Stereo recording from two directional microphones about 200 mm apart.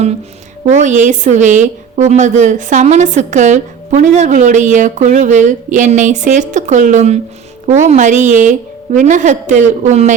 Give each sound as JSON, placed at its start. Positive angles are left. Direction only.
{"t": 0.6, "sound": "a woman's voice", "side_deg": -35}